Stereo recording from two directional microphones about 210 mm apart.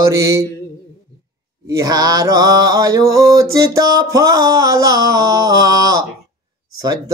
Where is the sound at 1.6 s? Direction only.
15° right (ahead or behind).